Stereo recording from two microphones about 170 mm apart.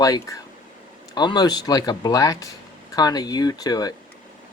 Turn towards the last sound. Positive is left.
turn(degrees=20)  # may be behind; listen again after turning